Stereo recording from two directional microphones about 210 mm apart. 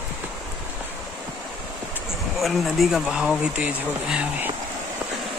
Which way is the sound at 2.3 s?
Centre (ahead or behind).